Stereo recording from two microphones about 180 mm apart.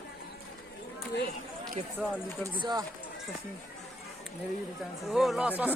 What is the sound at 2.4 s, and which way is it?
Speech, 25° right (ahead or behind).